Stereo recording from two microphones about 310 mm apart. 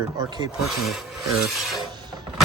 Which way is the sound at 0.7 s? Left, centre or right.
Centre.